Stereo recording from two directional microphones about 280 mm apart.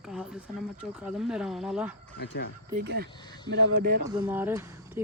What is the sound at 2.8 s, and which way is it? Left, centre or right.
Speech, right.